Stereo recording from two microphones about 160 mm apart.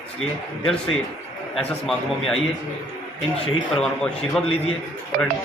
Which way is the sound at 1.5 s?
Centre (ahead or behind).